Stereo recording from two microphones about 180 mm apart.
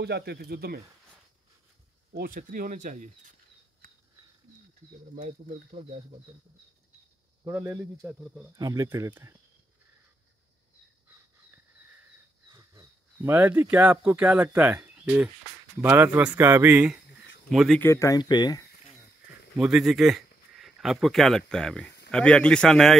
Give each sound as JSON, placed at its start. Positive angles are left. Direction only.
{"t": 0.0, "sound": "speech", "side_deg": -65}
{"t": 2.1, "sound": "speech", "side_deg": -50}
{"t": 5.1, "sound": "speech", "side_deg": -35}
{"t": 7.4, "sound": "a man's voice", "side_deg": -15}
{"t": 8.5, "sound": "a man's voice", "side_deg": -20}
{"t": 12.5, "sound": "a man's voice", "side_deg": -15}
{"t": 17.7, "sound": "speech", "side_deg": 15}
{"t": 19.6, "sound": "a man's voice", "side_deg": -5}